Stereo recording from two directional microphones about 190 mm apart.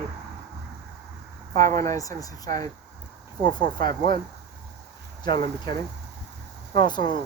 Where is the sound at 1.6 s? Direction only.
15° left (ahead or behind).